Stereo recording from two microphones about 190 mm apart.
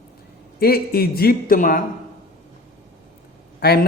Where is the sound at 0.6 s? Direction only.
55° left (ahead or behind).